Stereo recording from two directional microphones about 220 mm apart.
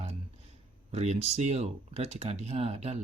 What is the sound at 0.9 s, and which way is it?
Speech, 30° right (ahead or behind).